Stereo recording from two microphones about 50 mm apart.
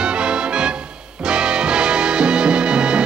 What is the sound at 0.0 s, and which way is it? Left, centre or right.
Music, centre.